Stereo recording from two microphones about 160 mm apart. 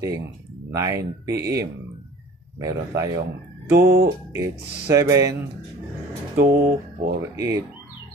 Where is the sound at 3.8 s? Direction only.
70° right (ahead or behind).